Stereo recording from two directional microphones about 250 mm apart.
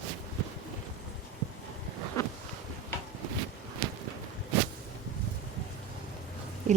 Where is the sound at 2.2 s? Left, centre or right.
Centre.